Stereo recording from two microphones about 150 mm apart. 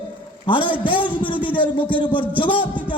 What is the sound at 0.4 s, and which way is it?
A man's voice, 35° left (ahead or behind).